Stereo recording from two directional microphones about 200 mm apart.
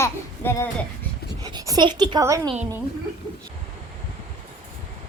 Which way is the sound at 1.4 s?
20° right (ahead or behind).